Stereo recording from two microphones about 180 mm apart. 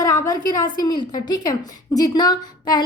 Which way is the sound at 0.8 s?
20° left (ahead or behind).